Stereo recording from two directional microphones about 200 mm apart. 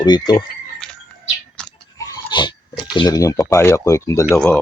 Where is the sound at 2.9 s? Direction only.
20° left (ahead or behind).